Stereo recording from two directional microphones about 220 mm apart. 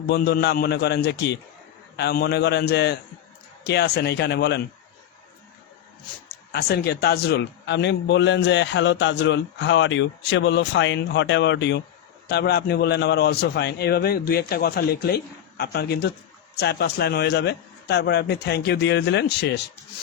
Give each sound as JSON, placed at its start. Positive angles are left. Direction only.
{"t": 0.1, "sound": "a man's voice", "side_deg": 45}
{"t": 6.5, "sound": "a man's voice", "side_deg": 45}